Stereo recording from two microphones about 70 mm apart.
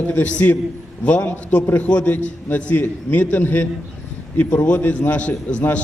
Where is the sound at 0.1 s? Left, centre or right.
Left.